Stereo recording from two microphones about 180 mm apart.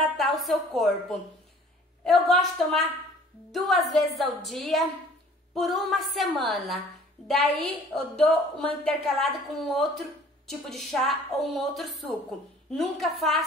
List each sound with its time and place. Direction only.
0.0 s a woman's voice: centre (ahead or behind)
2.0 s a woman's voice: centre (ahead or behind)